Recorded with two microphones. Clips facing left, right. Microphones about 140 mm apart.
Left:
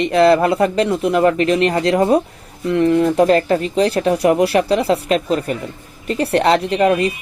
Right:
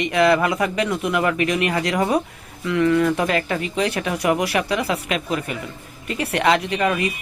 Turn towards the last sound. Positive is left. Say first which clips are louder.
# left 6 dB
turn(degrees=35)  # may be behind; listen again after turning